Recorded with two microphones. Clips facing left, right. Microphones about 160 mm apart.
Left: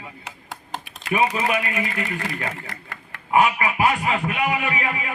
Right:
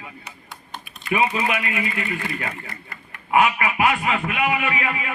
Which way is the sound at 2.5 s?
90° left.